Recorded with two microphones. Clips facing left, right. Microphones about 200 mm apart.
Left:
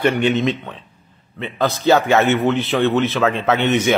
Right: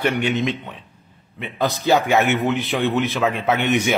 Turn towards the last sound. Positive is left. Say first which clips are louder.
# left 2 dB
turn(degrees=-10)  # may be behind; listen again after turning